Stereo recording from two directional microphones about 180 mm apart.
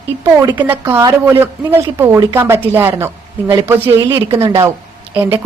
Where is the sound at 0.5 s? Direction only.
10° right (ahead or behind).